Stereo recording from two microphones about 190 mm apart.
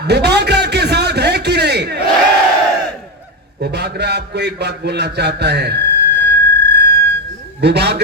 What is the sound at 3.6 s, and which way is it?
A man's voice, 60° right (ahead or behind).